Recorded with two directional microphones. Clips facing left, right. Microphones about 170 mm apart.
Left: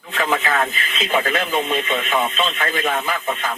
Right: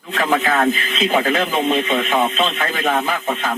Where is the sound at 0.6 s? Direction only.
50° right (ahead or behind).